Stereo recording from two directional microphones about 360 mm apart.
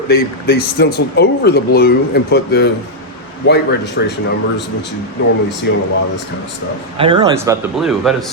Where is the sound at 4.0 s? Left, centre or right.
Left.